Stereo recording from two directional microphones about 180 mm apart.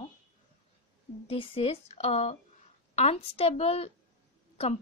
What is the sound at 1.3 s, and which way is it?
A woman's voice, 30° left (ahead or behind).